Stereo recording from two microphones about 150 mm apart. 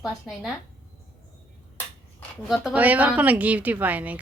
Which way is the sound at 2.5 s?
5° right (ahead or behind).